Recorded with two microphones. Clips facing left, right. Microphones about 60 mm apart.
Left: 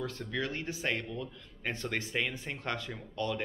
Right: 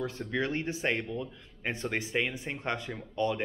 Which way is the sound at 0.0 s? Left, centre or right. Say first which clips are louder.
Right 3 dB; right.